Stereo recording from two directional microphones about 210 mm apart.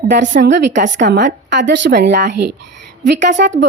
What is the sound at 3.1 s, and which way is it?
Speech, 35° right (ahead or behind).